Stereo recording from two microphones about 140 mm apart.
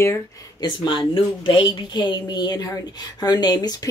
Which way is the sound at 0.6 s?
35° left (ahead or behind).